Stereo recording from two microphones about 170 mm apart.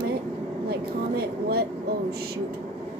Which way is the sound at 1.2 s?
65° right (ahead or behind).